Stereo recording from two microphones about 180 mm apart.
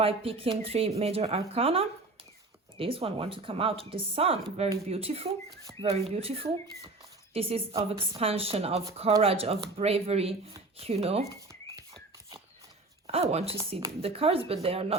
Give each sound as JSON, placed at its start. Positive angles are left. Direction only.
{"t": 0.0, "sound": "speech", "side_deg": -30}
{"t": 13.1, "sound": "speech", "side_deg": -35}